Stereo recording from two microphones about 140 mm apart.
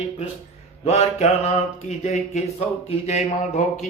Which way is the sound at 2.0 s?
55° left (ahead or behind).